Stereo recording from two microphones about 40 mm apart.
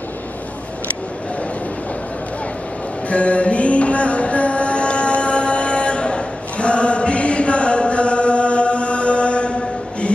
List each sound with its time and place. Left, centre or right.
3.1 s music: left